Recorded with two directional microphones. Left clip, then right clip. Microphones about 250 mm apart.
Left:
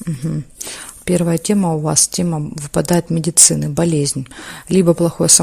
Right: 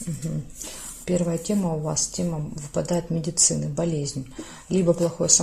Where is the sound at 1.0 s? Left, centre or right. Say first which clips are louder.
Left 8 dB; left.